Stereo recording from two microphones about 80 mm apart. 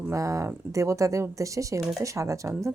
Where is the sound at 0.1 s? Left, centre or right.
Right.